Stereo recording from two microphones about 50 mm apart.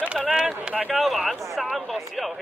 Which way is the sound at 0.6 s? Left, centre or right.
Right.